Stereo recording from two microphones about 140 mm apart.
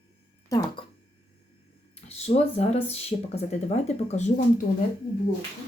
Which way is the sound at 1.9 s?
45° left (ahead or behind).